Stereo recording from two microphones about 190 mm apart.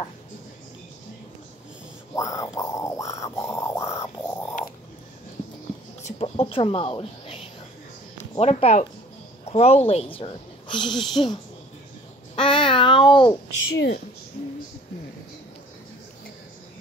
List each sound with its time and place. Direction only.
2.1 s grunt: 15° left (ahead or behind)
6.0 s speech: 30° left (ahead or behind)
10.9 s speech: centre (ahead or behind)
12.4 s babbling: 25° left (ahead or behind)
13.7 s a woman's voice: 60° left (ahead or behind)